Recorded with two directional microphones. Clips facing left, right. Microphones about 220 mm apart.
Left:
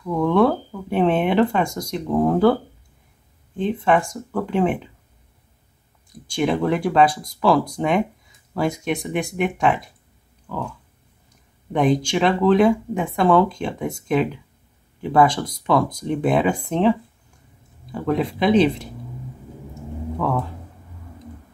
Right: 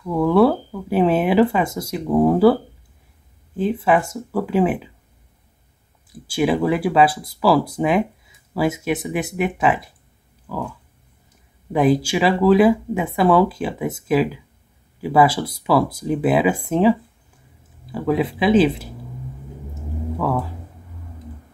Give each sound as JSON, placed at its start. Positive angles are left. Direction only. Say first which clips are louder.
{"t": 0.0, "sound": "speech", "louder": "right 2 dB", "side_deg": -5}
{"t": 6.2, "sound": "speech", "louder": "right 2 dB", "side_deg": -5}
{"t": 10.4, "sound": "a sound", "louder": "right 1 dB", "side_deg": -5}
{"t": 11.7, "sound": "speech", "louder": "right 2 dB", "side_deg": -5}
{"t": 17.9, "sound": "speech", "louder": "right 2 dB", "side_deg": -5}
{"t": 19.7, "sound": "a sound", "louder": "right 1 dB", "side_deg": -5}